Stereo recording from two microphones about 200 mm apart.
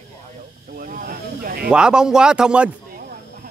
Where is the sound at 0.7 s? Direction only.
45° right (ahead or behind).